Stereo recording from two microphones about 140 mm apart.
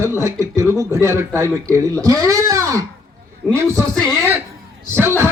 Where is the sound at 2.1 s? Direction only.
25° right (ahead or behind).